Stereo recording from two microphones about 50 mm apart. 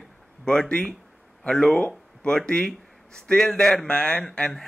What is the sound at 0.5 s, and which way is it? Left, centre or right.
Speech, centre.